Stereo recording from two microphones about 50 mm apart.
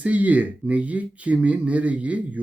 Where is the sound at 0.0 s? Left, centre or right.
Right.